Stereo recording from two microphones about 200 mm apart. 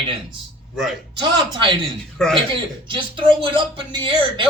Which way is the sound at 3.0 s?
25° right (ahead or behind).